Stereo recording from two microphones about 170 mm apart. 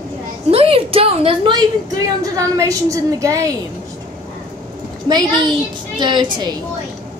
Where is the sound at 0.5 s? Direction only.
35° right (ahead or behind); by 3.4 s 20° right (ahead or behind).